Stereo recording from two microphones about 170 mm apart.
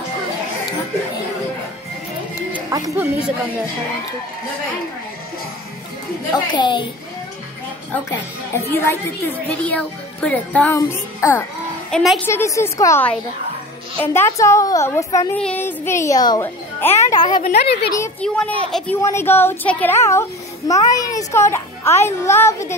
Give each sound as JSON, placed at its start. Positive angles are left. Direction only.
{"t": 2.7, "sound": "speech", "side_deg": -20}
{"t": 6.3, "sound": "a child's voice", "side_deg": 25}
{"t": 8.1, "sound": "speech", "side_deg": 15}
{"t": 11.9, "sound": "a woman's voice", "side_deg": 0}
{"t": 12.3, "sound": "speech", "side_deg": 15}
{"t": 17.5, "sound": "a woman's voice", "side_deg": 70}
{"t": 18.2, "sound": "speech", "side_deg": 5}